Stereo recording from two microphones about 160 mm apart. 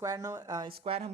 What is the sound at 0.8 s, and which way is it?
Speech, 35° right (ahead or behind).